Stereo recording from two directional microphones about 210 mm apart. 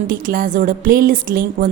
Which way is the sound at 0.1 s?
40° right (ahead or behind).